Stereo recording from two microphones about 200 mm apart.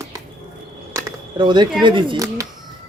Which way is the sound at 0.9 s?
15° right (ahead or behind).